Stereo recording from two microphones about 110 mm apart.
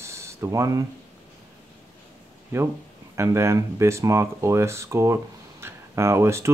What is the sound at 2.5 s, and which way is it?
Speech, 25° right (ahead or behind).